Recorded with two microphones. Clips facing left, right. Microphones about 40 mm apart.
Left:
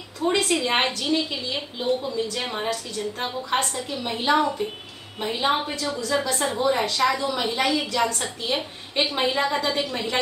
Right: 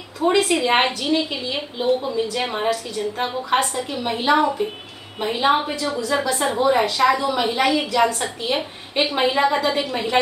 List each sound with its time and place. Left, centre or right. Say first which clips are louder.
0.3 s a woman's voice: right 5 dB; centre